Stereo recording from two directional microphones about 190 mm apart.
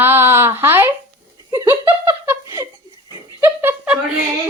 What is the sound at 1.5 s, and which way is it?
Laughter, 15° right (ahead or behind).